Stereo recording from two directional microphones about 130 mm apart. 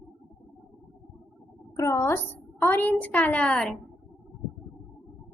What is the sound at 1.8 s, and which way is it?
A child's voice, 20° left (ahead or behind).